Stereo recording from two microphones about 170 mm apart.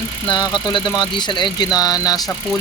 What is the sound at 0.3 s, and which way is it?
Speech, 25° left (ahead or behind).